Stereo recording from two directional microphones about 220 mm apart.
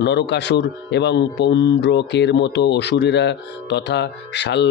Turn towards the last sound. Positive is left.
turn(degrees=50)  # may be behind; listen again after turning